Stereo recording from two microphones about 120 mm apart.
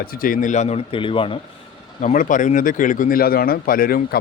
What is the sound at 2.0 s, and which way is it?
Speech, 90° left.